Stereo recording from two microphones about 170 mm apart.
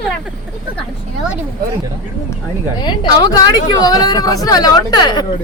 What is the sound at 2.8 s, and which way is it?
A man's voice, 25° left (ahead or behind).